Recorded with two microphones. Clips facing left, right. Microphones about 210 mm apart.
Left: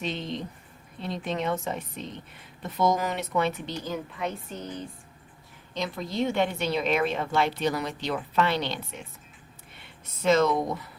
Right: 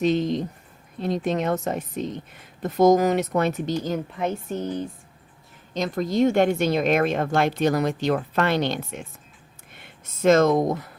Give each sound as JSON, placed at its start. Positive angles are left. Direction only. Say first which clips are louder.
{"t": 0.0, "sound": "a woman's voice", "louder": "right 11 dB", "side_deg": -45}
{"t": 5.7, "sound": "a woman's voice", "louder": "right 7 dB", "side_deg": -45}
{"t": 9.8, "sound": "speech", "louder": "right 6 dB", "side_deg": -45}